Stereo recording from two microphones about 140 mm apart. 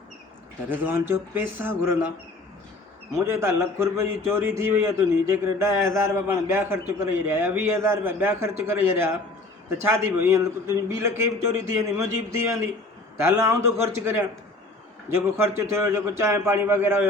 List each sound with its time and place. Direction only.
0.7 s speech: 15° right (ahead or behind)
3.2 s a man's voice: 20° right (ahead or behind)